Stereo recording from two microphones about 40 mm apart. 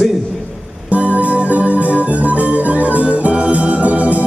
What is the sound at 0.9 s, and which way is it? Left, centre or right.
Music, right.